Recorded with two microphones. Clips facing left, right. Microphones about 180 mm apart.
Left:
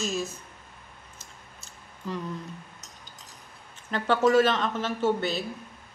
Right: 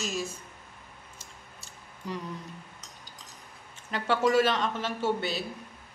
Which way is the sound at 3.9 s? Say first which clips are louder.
Left 3 dB; 10° right (ahead or behind).